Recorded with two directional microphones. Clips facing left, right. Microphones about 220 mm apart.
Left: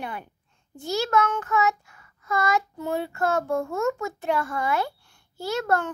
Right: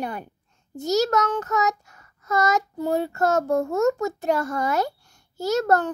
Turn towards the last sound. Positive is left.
turn(degrees=-40)  # may be behind; listen again after turning